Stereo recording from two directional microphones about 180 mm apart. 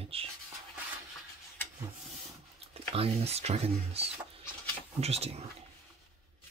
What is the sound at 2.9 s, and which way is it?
Speech, 35° right (ahead or behind).